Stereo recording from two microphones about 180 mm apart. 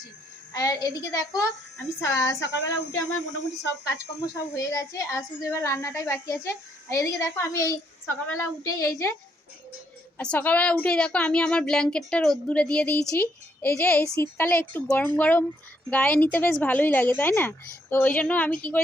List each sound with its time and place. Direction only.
0.5 s a woman's voice: 20° left (ahead or behind)
2.4 s speech: 90° left
4.5 s a woman's voice: 15° left (ahead or behind)
10.2 s a woman's voice: 5° left (ahead or behind)